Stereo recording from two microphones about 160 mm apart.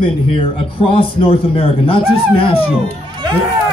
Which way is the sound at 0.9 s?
35° left (ahead or behind).